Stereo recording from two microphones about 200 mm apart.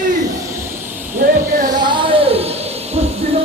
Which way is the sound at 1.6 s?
20° right (ahead or behind).